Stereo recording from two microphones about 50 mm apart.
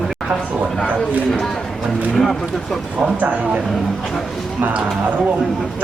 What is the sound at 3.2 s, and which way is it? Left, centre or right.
Speech, right.